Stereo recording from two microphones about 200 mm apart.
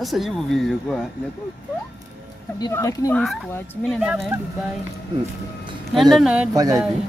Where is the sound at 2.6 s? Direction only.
15° left (ahead or behind).